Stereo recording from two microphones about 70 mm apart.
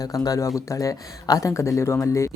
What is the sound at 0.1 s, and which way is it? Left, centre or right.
Speech, left.